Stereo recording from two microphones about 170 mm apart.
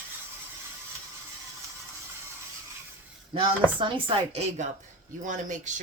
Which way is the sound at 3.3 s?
30° right (ahead or behind).